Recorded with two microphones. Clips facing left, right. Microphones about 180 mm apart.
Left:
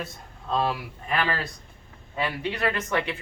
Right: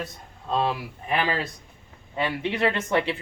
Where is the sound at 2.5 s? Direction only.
25° right (ahead or behind).